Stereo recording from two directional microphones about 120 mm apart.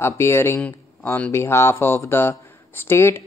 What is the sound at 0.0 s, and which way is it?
A man's voice, 20° left (ahead or behind).